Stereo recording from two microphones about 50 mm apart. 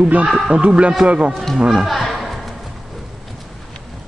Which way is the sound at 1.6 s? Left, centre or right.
Centre.